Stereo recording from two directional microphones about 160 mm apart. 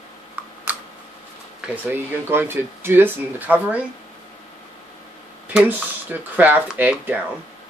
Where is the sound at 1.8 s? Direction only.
15° right (ahead or behind).